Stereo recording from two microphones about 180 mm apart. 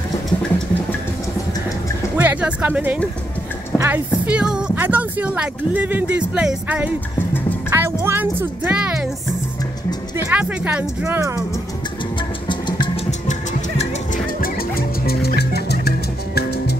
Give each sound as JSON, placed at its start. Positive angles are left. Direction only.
{"t": 2.1, "sound": "speech", "side_deg": -10}
{"t": 10.1, "sound": "speech", "side_deg": -10}
{"t": 12.4, "sound": "music", "side_deg": 25}
{"t": 13.3, "sound": "music", "side_deg": 40}